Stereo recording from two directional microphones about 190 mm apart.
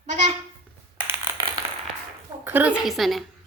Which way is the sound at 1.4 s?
20° right (ahead or behind).